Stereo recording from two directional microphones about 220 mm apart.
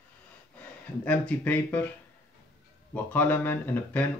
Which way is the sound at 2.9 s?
10° left (ahead or behind).